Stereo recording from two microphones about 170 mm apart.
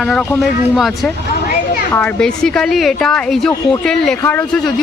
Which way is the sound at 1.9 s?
10° left (ahead or behind).